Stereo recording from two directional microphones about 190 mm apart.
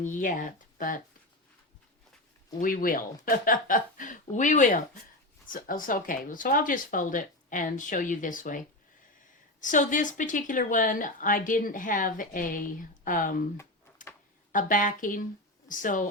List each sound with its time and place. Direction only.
0.0 s speech: 40° left (ahead or behind)
2.6 s speech: 45° left (ahead or behind)
13.6 s a sound: 15° left (ahead or behind)
14.5 s speech: 45° left (ahead or behind)